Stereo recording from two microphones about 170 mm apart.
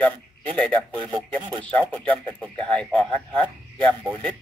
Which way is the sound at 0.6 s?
5° left (ahead or behind).